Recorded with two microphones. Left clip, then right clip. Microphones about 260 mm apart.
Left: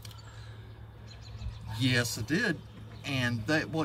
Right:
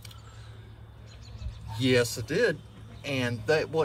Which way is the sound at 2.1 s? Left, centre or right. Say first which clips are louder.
Right 4 dB; right.